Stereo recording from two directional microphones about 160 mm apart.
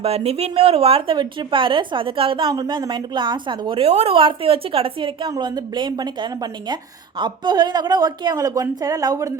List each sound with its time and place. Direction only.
0.0 s a woman's voice: 40° right (ahead or behind); by 9.3 s 20° right (ahead or behind)